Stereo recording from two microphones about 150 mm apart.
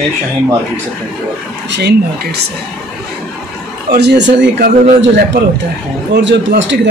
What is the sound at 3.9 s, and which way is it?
A man's voice, 90° right.